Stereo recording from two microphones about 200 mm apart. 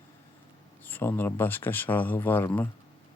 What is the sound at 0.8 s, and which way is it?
Speech, 10° left (ahead or behind).